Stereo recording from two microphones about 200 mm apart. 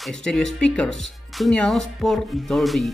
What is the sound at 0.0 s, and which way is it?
Speech, 5° left (ahead or behind).